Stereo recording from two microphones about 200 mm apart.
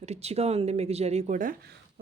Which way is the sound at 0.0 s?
30° right (ahead or behind).